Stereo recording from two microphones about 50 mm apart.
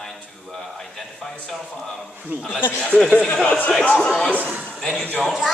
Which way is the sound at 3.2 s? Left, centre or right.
Centre.